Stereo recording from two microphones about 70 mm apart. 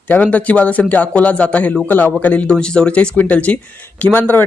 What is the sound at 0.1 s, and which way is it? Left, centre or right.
Speech, left.